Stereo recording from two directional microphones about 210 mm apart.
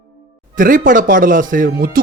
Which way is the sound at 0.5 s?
40° right (ahead or behind).